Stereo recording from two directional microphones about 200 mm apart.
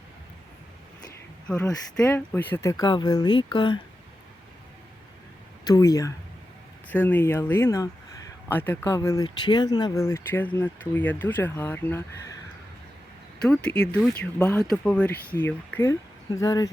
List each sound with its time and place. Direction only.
1.5 s speech: 10° left (ahead or behind); by 3.8 s 25° left (ahead or behind)
5.6 s speech: 15° left (ahead or behind)
13.4 s speech: 5° left (ahead or behind)